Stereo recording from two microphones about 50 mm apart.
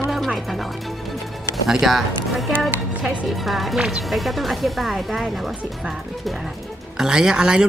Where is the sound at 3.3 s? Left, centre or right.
Centre.